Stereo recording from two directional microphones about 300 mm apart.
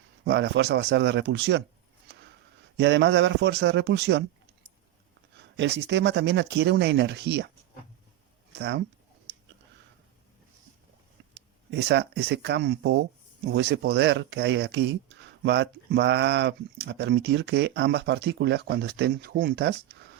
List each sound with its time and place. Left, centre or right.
0.3 s speech: right
2.7 s speech: right
5.5 s speech: right
8.5 s speech: right
11.3 s speech: right